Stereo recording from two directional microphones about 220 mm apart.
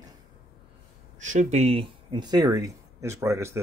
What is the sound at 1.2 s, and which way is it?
Speech, 30° right (ahead or behind).